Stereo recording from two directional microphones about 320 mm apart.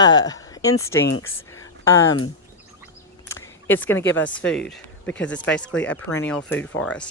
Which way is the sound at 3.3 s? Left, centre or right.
Centre.